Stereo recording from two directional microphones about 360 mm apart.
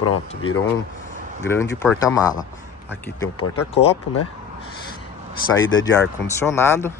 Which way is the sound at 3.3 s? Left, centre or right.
Left.